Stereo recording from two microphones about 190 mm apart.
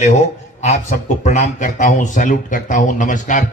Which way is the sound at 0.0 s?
40° left (ahead or behind).